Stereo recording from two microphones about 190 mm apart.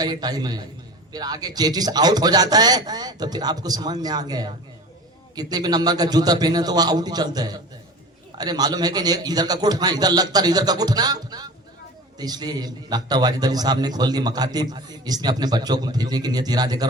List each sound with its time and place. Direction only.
0.0 s a man's voice: 20° right (ahead or behind)